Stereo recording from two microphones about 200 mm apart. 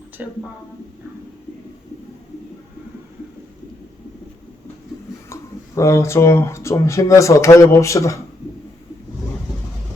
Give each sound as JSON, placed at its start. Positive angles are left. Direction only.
{"t": 0.2, "sound": "speech", "side_deg": -5}
{"t": 5.3, "sound": "speech", "side_deg": 15}